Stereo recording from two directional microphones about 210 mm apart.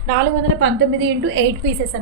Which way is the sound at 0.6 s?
60° right (ahead or behind).